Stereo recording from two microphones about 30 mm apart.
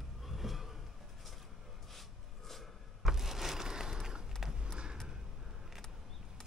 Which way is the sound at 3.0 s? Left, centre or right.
Centre.